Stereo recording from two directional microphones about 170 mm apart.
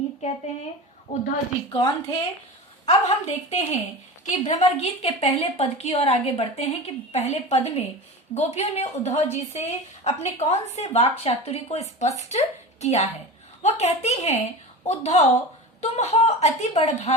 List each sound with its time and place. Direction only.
0.2 s a woman's voice: 40° left (ahead or behind)
1.1 s a woman's voice: 55° left (ahead or behind)
1.7 s a woman's voice: 30° left (ahead or behind)
2.8 s a woman's voice: 45° left (ahead or behind)